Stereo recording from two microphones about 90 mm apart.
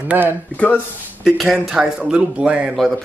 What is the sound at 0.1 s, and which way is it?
Speech, 20° right (ahead or behind).